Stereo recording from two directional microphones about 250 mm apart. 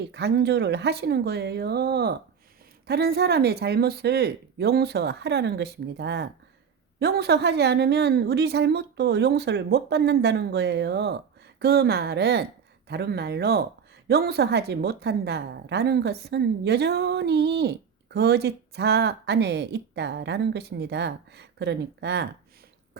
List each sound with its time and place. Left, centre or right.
0.1 s a woman's voice: right